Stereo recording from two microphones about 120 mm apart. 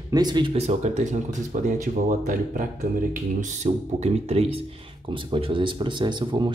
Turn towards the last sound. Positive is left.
turn(degrees=-40)  # may be behind; listen again after turning